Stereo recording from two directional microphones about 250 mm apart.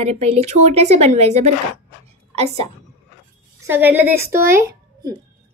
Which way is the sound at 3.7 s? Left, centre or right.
Centre.